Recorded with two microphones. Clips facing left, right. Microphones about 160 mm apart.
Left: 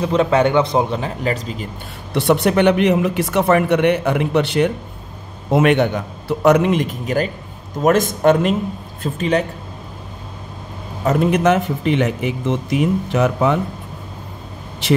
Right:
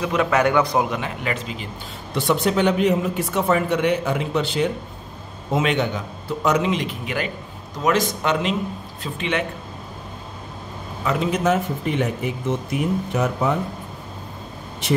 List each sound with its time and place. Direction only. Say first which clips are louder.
0.0 s a man's voice: left 4 dB; 30° left (ahead or behind)
2.1 s a man's voice: left 5 dB; 65° left (ahead or behind); by 9.5 s 40° left (ahead or behind)
11.1 s speech: left 5 dB; 55° left (ahead or behind); by 13.6 s 90° left
14.8 s speech: left 4 dB; 90° left